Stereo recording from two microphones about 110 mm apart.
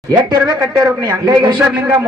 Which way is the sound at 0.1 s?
40° right (ahead or behind).